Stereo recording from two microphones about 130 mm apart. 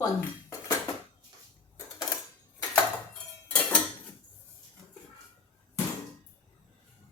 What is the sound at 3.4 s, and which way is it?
Dishes, 10° left (ahead or behind).